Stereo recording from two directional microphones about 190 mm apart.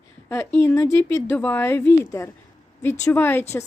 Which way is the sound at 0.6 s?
15° left (ahead or behind).